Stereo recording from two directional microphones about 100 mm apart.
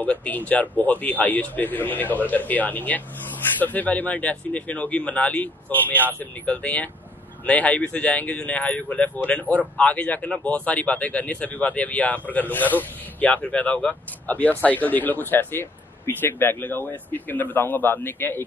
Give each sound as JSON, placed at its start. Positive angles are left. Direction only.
{"t": 0.0, "sound": "speech", "side_deg": 15}